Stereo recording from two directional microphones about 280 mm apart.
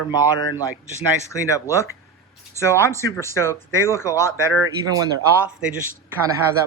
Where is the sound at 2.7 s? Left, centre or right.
Centre.